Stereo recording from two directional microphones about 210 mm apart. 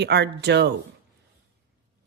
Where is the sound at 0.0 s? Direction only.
55° right (ahead or behind).